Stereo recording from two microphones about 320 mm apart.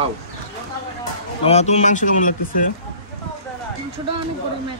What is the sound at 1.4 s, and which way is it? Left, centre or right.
Speech, centre.